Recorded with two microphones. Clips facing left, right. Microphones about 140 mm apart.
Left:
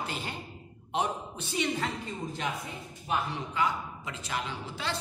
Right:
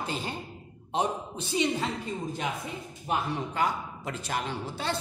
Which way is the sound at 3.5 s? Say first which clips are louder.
Right 1 dB; 45° right (ahead or behind).